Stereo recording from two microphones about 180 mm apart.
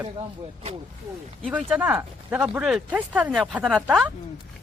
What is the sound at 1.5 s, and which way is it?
Speech, 10° right (ahead or behind).